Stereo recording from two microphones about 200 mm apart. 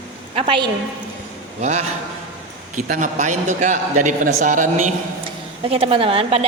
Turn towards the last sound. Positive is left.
turn(degrees=-30)  # may be behind; listen again after turning